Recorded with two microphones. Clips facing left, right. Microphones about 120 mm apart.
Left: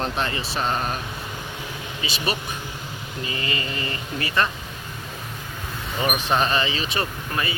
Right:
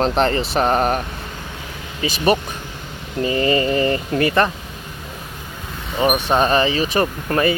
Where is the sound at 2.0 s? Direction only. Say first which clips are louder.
Right 10 dB; 50° right (ahead or behind).